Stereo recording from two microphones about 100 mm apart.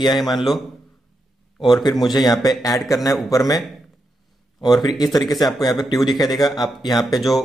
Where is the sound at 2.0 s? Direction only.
45° left (ahead or behind).